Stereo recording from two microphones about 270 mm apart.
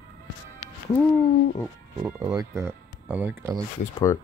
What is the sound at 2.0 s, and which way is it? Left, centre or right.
Speech, centre.